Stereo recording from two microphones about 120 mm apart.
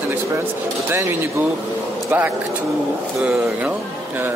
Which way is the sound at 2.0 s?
15° right (ahead or behind).